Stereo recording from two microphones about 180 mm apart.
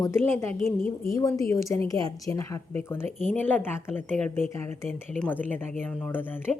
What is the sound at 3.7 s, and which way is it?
Speech, 10° left (ahead or behind).